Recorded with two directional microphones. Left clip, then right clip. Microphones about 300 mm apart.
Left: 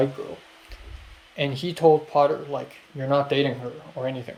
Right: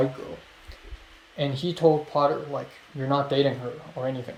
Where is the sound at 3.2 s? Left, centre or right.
Left.